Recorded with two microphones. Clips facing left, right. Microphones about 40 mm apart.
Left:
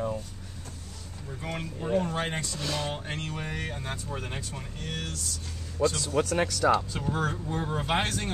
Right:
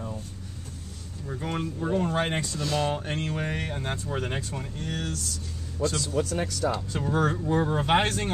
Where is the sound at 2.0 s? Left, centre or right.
Right.